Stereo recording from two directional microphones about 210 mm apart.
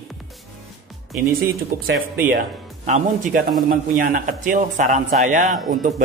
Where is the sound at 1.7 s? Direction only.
45° right (ahead or behind).